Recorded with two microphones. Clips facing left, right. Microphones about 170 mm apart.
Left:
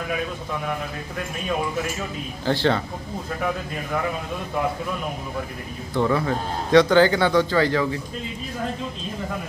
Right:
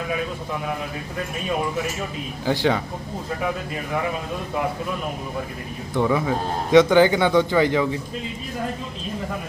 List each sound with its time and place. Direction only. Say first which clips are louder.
2.4 s a man's voice: even; 10° right (ahead or behind)
6.0 s a man's voice: right 1 dB; 10° right (ahead or behind)